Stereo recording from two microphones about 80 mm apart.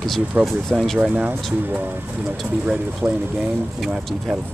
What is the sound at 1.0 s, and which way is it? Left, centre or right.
Speech, right.